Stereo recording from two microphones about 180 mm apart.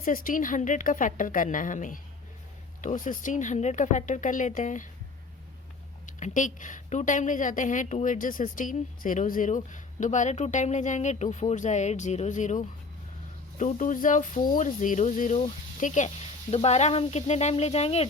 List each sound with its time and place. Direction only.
0.0 s a woman's voice: 50° left (ahead or behind)
6.1 s a woman's voice: 45° left (ahead or behind)